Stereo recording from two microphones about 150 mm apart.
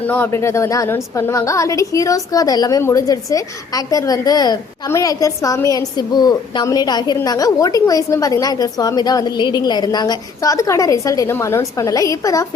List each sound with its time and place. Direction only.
0.1 s a woman's voice: 15° left (ahead or behind)